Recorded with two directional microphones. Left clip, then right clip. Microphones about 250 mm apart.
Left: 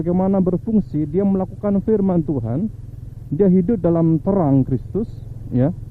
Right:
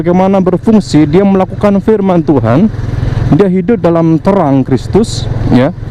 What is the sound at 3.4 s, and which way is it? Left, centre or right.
Speech, centre.